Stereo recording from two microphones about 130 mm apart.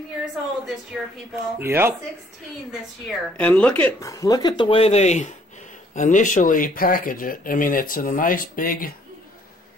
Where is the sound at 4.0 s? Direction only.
25° left (ahead or behind).